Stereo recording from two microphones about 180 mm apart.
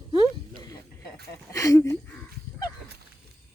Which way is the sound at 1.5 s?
15° left (ahead or behind).